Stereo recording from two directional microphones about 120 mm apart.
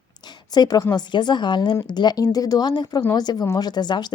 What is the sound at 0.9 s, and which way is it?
Speech, 35° left (ahead or behind).